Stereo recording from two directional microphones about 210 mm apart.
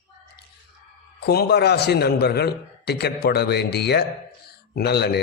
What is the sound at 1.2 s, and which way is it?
A man's voice, 50° left (ahead or behind).